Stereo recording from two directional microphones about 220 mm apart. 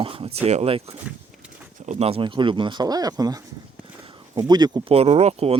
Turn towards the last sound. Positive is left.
turn(degrees=-25)  # may be behind; listen again after turning